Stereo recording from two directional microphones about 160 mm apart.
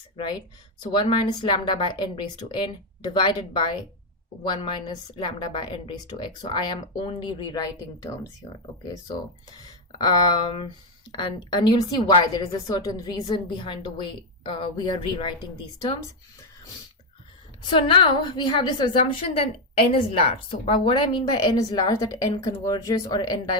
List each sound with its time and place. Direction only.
0.2 s a woman's voice: 25° left (ahead or behind)
5.1 s a woman's voice: 30° left (ahead or behind)
10.0 s a woman's voice: 30° left (ahead or behind)
17.7 s a woman's voice: 30° left (ahead or behind)